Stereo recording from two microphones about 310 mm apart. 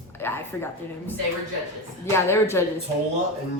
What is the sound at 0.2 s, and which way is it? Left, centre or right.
Speech, centre.